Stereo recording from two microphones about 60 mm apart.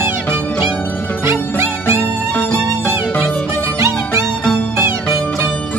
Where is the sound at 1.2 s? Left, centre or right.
Right.